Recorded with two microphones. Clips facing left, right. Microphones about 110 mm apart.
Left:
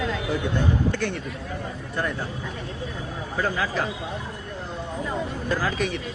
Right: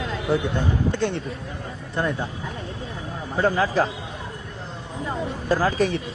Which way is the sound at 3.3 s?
35° right (ahead or behind).